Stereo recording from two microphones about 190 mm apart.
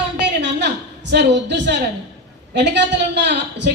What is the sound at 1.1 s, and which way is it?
Speech, 65° right (ahead or behind).